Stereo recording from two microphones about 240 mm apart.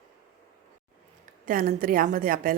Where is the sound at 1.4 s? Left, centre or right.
Right.